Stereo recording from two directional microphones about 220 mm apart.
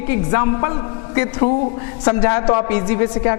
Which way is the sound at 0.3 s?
20° left (ahead or behind).